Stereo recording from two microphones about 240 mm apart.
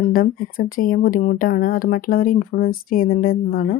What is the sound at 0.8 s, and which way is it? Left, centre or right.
Speech, left.